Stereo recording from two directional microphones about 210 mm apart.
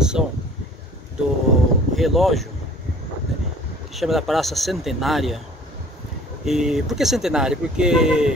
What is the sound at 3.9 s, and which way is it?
Speech, centre (ahead or behind).